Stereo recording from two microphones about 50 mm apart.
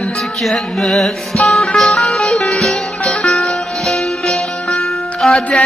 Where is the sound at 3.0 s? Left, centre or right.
Centre.